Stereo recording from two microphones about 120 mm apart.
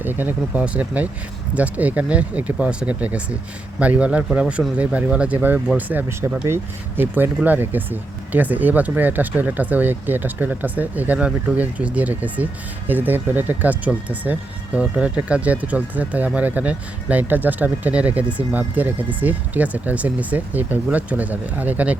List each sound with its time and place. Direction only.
0.0 s speech: 15° right (ahead or behind)